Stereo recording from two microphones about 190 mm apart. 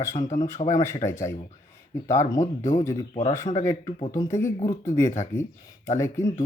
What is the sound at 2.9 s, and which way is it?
Speech, 30° left (ahead or behind).